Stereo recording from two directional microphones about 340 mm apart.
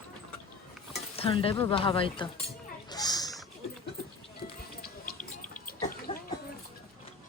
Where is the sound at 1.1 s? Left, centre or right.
Centre.